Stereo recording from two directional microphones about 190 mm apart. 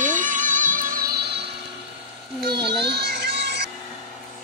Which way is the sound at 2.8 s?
60° right (ahead or behind).